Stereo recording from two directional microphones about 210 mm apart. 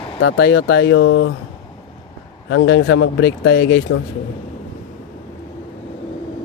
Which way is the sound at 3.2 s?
50° left (ahead or behind).